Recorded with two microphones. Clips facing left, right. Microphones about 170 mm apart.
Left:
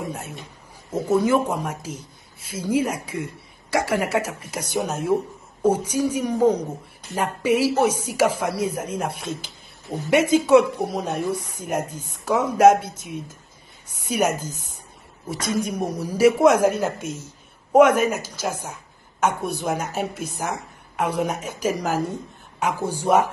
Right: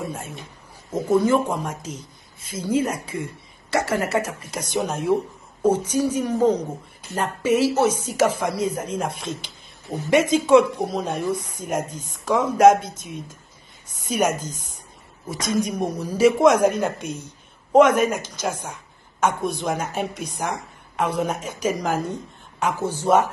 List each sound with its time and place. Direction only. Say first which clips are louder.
0.9 s speech: right 1 dB; 10° left (ahead or behind)
15.6 s speech: right 1 dB; 10° left (ahead or behind)